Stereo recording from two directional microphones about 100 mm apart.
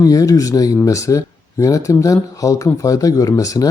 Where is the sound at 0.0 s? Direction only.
35° left (ahead or behind).